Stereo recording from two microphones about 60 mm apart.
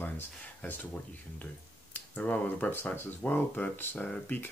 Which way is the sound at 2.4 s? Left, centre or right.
Left.